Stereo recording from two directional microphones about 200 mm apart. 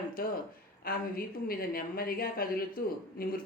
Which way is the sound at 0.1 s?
45° left (ahead or behind).